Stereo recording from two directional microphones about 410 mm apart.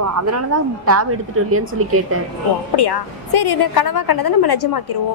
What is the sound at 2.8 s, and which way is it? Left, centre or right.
A woman's voice, left.